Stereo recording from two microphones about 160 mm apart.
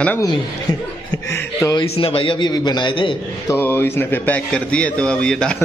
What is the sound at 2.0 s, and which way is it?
A man's voice, 35° left (ahead or behind).